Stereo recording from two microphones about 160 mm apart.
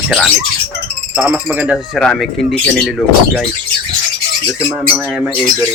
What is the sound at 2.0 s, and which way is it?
Speech, centre (ahead or behind).